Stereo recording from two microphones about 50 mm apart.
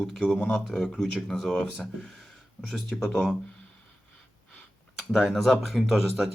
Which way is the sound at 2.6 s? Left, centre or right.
Centre.